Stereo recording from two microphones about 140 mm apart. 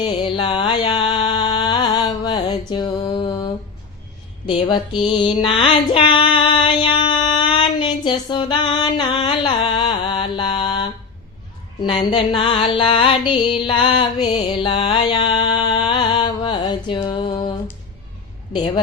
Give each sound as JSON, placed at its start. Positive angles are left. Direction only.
{"t": 0.0, "sound": "mantra", "side_deg": 40}
{"t": 1.5, "sound": "music", "side_deg": 30}
{"t": 2.0, "sound": "mantra", "side_deg": 30}
{"t": 4.4, "sound": "music", "side_deg": 35}